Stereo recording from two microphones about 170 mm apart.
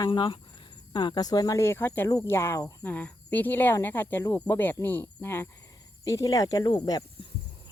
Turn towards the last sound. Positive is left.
turn(degrees=25)  # may be behind; listen again after turning